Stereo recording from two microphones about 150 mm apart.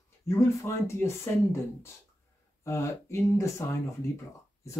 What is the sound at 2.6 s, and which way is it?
Speech, 20° left (ahead or behind).